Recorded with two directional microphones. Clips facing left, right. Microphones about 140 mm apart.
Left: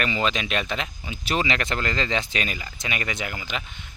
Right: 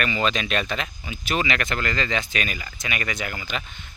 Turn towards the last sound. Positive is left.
turn(degrees=15)  # may be behind; listen again after turning